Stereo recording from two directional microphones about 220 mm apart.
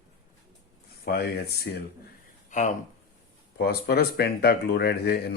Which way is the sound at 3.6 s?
45° left (ahead or behind).